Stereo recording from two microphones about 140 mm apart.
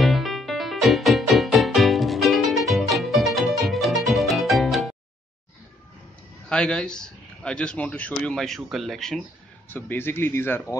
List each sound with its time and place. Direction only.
0.0 s music: centre (ahead or behind)
6.5 s a man's voice: 5° left (ahead or behind)
9.7 s a man's voice: 15° left (ahead or behind)